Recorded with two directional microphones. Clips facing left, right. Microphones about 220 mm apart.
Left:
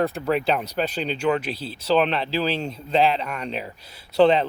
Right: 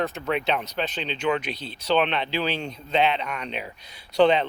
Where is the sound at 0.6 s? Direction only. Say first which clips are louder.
Left 4 dB; 35° left (ahead or behind).